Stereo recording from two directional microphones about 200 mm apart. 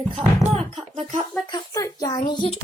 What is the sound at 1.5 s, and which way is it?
A child's voice, 20° left (ahead or behind).